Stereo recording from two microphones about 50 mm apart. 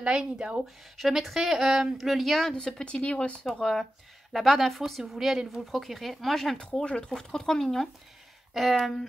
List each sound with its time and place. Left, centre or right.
0.2 s speech: centre
0.9 s speech: centre
2.5 s speech: left
3.5 s speech: centre
6.6 s speech: left; by 8.9 s centre